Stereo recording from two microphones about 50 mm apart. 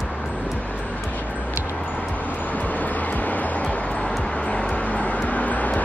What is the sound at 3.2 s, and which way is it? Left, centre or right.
Music, left.